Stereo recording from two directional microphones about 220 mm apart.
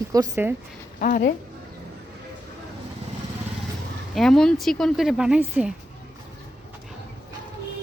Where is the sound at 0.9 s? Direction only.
40° left (ahead or behind).